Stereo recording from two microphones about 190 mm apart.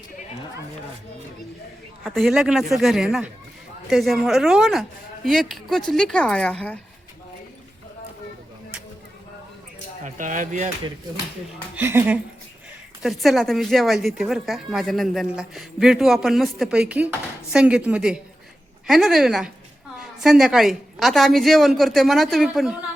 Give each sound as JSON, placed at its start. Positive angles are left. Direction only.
{"t": 2.0, "sound": "a woman's voice", "side_deg": 0}
{"t": 10.0, "sound": "speech", "side_deg": -45}
{"t": 11.8, "sound": "a woman's voice", "side_deg": -10}